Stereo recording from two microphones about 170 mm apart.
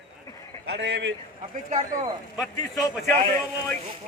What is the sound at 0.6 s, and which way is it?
Speech, 75° right (ahead or behind).